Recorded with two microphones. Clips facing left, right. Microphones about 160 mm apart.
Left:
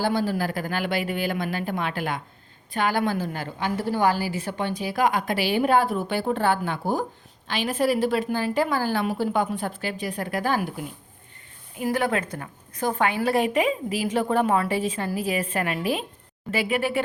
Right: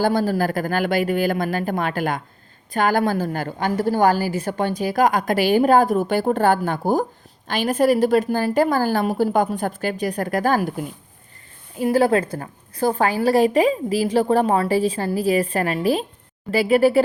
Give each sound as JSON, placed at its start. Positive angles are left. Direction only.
{"t": 0.0, "sound": "a woman's voice", "side_deg": -45}
{"t": 11.8, "sound": "a woman's voice", "side_deg": -30}